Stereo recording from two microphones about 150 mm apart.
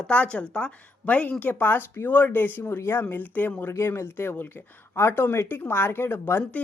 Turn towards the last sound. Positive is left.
turn(degrees=15)  # may be behind; listen again after turning